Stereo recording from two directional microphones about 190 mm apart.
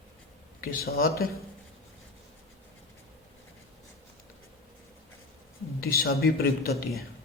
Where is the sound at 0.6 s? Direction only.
50° left (ahead or behind).